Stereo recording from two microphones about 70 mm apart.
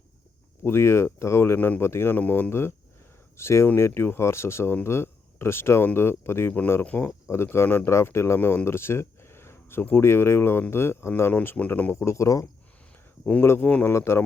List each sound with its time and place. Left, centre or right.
0.6 s speech: left
1.5 s speech: left
1.8 s speech: left
8.4 s speech: left
8.6 s a sound: left
9.8 s speech: left
11.3 s speech: left
11.9 s speech: left
13.4 s speech: left
13.7 s speech: left
13.9 s speech: left